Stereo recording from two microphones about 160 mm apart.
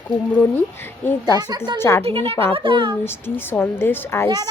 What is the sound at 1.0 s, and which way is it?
Speech, 15° left (ahead or behind).